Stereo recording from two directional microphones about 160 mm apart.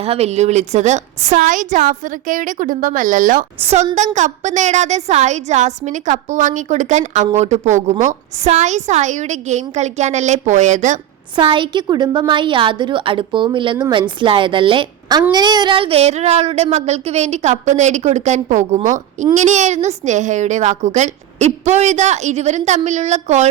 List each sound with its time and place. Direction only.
0.0 s a woman's voice: 40° right (ahead or behind); by 3.4 s 55° right (ahead or behind)
3.6 s a woman's voice: 40° right (ahead or behind)
11.3 s a woman's voice: 30° right (ahead or behind)